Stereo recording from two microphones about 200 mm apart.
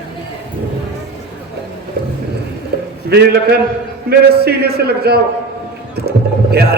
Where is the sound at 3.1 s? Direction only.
55° right (ahead or behind).